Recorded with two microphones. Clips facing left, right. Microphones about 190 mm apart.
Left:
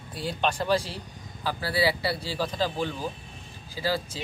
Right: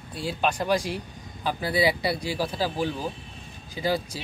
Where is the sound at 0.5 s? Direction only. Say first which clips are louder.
Right 1 dB; 15° right (ahead or behind).